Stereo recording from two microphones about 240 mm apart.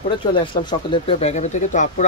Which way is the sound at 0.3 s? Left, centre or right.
Left.